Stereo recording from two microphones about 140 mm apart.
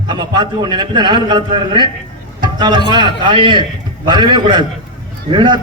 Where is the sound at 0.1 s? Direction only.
30° right (ahead or behind).